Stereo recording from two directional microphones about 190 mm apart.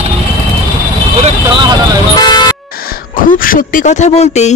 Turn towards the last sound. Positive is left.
turn(degrees=35)  # may be behind; listen again after turning